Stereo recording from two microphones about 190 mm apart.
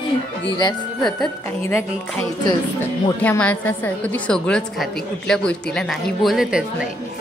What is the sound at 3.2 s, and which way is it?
A woman's voice, 10° left (ahead or behind).